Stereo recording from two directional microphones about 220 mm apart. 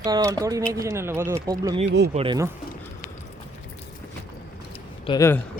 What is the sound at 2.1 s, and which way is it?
Speech, 25° right (ahead or behind).